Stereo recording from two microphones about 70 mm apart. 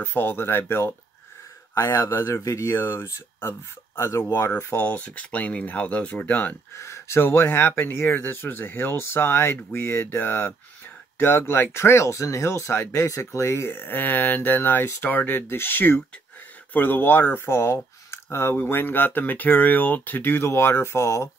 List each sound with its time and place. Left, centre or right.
0.0 s speech: left
1.8 s speech: left
2.7 s speech: left
6.7 s speech: left